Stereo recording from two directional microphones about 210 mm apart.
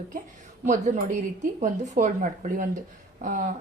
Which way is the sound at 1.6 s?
40° right (ahead or behind).